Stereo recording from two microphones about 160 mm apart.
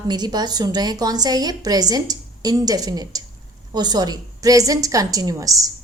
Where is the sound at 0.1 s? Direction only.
25° right (ahead or behind).